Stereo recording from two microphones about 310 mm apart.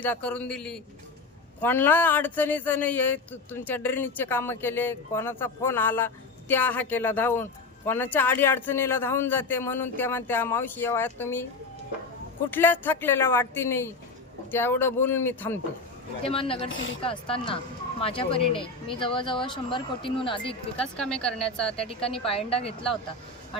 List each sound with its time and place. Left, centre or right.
0.0 s speech: centre
12.5 s speech: centre
16.2 s speech: centre
20.7 s speech: centre
21.8 s speech: centre